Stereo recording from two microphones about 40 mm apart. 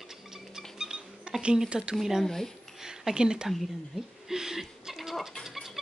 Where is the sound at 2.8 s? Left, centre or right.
Centre.